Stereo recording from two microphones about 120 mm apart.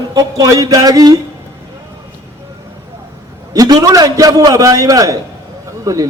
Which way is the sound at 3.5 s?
30° right (ahead or behind).